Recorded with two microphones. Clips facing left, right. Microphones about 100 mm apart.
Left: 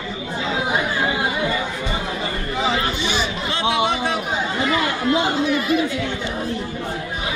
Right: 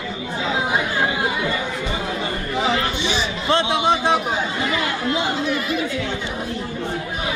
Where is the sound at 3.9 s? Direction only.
25° right (ahead or behind).